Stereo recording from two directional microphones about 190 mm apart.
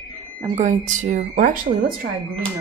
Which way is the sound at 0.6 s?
40° right (ahead or behind).